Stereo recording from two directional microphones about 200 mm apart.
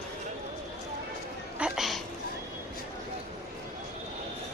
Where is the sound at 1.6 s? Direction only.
Centre (ahead or behind).